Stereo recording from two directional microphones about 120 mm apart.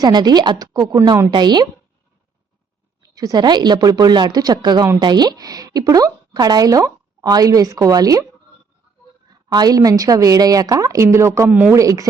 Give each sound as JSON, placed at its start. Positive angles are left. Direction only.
{"t": 0.0, "sound": "speech", "side_deg": -35}
{"t": 3.0, "sound": "speech", "side_deg": -30}
{"t": 9.3, "sound": "a woman's voice", "side_deg": -35}
{"t": 11.7, "sound": "a woman's voice", "side_deg": -25}